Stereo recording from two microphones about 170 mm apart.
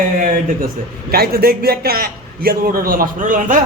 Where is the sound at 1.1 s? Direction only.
65° right (ahead or behind).